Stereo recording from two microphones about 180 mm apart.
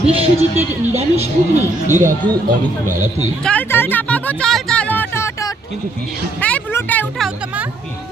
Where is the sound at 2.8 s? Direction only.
45° right (ahead or behind).